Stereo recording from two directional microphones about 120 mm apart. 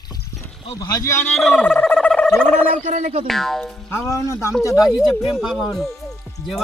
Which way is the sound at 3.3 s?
Centre (ahead or behind).